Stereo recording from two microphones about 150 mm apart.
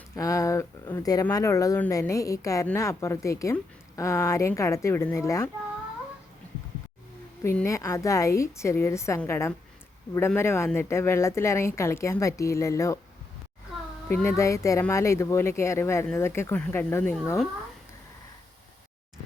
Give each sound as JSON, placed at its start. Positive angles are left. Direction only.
{"t": 0.2, "sound": "speech", "side_deg": 20}
{"t": 7.5, "sound": "speech", "side_deg": 20}
{"t": 14.1, "sound": "speech", "side_deg": 15}